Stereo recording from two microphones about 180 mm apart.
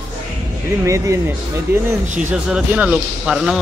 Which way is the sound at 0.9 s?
15° right (ahead or behind).